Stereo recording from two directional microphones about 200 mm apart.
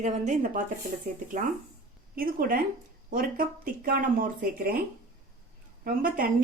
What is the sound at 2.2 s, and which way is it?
Speech, 45° right (ahead or behind).